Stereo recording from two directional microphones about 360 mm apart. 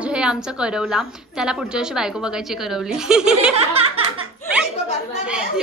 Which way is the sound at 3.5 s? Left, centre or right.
Centre.